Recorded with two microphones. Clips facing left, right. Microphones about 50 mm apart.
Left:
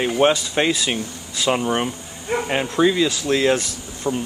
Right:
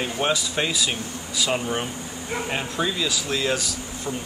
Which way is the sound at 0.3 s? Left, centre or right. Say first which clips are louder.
Left 5 dB; left.